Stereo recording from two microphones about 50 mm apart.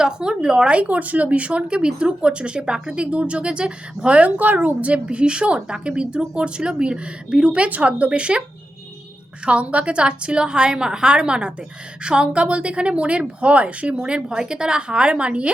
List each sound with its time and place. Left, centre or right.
0.0 s a woman's voice: centre
4.4 s a woman's voice: right
9.5 s a woman's voice: right